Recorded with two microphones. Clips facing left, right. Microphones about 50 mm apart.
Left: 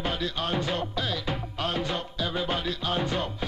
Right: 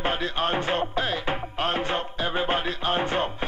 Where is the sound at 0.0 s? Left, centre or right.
Right.